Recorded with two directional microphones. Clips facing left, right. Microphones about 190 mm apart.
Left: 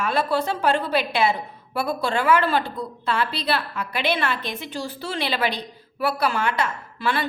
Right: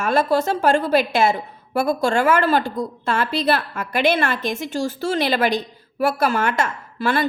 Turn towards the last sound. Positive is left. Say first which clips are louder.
# right 4 dB
turn(degrees=-45)  # may be behind; listen again after turning